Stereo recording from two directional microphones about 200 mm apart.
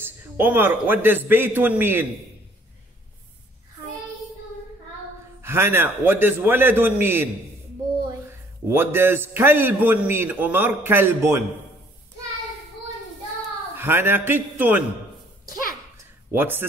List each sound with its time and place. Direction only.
0.0 s a man's voice: 10° right (ahead or behind)
5.4 s a man's voice: 10° right (ahead or behind)
8.3 s a man's voice: 10° right (ahead or behind)
13.7 s a man's voice: 10° right (ahead or behind)
16.3 s speech: 10° right (ahead or behind)